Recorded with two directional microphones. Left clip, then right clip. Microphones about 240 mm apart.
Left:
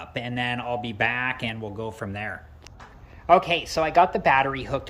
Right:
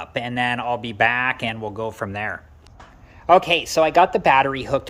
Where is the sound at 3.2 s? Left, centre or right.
Right.